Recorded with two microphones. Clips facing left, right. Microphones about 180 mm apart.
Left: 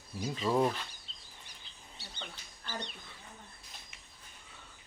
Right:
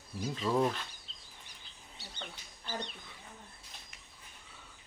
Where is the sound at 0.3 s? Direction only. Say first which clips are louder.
Left 1 dB; 5° left (ahead or behind).